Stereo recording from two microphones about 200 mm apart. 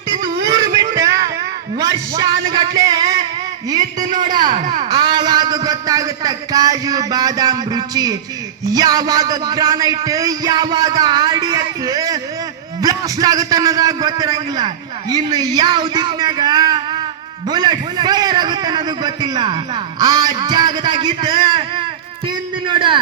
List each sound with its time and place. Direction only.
0.4 s a sound: 20° right (ahead or behind)
1.8 s a man's voice: 20° right (ahead or behind)
4.0 s a man's voice: 20° right (ahead or behind)
4.5 s a man's voice: 35° right (ahead or behind)
22.6 s a man's voice: 25° right (ahead or behind)